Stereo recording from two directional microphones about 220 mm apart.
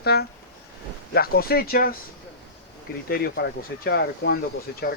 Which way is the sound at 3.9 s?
50° left (ahead or behind).